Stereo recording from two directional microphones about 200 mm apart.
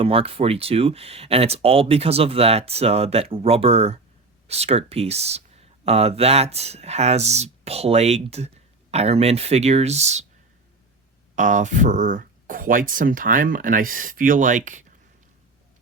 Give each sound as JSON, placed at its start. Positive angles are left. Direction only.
{"t": 0.0, "sound": "speech", "side_deg": -30}
{"t": 11.3, "sound": "speech", "side_deg": -40}